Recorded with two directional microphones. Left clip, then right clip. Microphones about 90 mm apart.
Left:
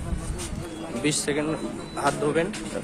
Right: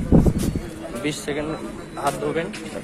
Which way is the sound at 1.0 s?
85° left.